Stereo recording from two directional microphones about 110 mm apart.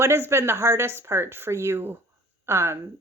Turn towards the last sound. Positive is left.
turn(degrees=-25)  # may be behind; listen again after turning